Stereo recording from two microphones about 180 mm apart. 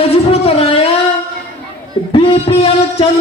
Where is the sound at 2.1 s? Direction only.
30° left (ahead or behind).